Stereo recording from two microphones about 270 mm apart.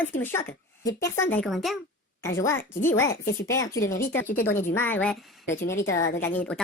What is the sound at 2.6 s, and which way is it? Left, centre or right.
Speech, left.